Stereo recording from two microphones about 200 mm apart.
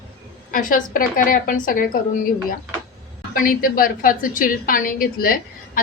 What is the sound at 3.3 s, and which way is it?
A woman's voice, 45° left (ahead or behind).